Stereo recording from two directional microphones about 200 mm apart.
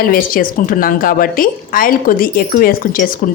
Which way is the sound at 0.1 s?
45° left (ahead or behind).